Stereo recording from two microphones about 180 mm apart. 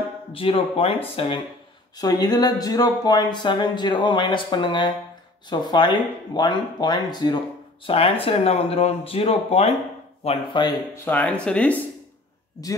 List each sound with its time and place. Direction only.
0.3 s speech: 30° left (ahead or behind)
11.1 s speech: 10° left (ahead or behind)